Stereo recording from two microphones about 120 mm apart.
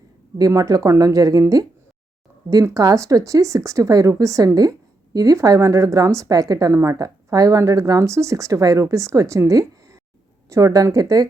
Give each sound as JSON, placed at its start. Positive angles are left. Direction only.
{"t": 0.3, "sound": "a woman's voice", "side_deg": -30}